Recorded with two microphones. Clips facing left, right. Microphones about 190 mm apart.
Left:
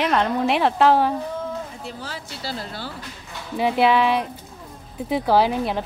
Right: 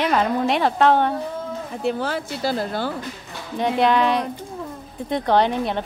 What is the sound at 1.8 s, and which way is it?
Speech, 60° right (ahead or behind).